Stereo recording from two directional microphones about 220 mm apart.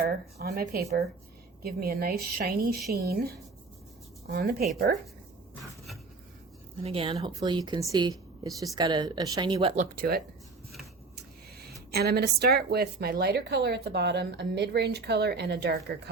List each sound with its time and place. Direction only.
0.0 s a woman's voice: 45° right (ahead or behind)
6.8 s a woman's voice: 25° right (ahead or behind); by 10.2 s 45° right (ahead or behind)
11.9 s a woman's voice: 45° right (ahead or behind)